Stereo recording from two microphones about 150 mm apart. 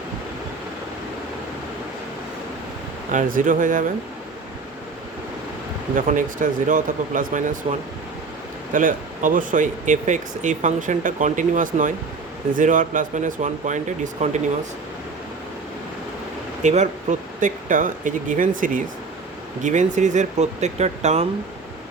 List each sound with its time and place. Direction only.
3.1 s speech: 60° right (ahead or behind)
6.0 s speech: 60° right (ahead or behind)
16.6 s speech: 50° right (ahead or behind)